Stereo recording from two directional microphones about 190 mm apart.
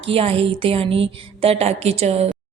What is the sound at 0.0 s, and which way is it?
A woman's voice, 30° right (ahead or behind).